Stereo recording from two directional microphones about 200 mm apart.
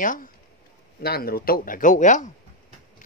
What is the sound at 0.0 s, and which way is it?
A man's voice, 40° left (ahead or behind).